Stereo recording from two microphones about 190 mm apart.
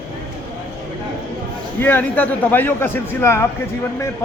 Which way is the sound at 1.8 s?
10° left (ahead or behind).